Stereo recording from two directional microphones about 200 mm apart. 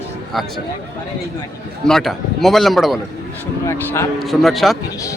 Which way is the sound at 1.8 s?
Centre (ahead or behind).